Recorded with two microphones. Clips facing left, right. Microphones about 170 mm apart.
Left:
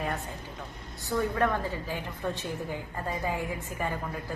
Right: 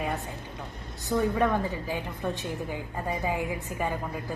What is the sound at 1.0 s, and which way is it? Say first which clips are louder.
A woman's voice: right 2 dB; 15° right (ahead or behind).